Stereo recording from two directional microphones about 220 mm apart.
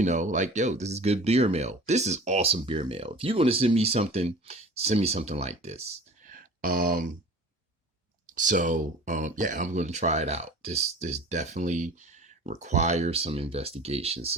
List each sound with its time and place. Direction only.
0.0 s speech: 35° right (ahead or behind)
6.2 s a sound: 40° right (ahead or behind)
8.4 s speech: 35° right (ahead or behind)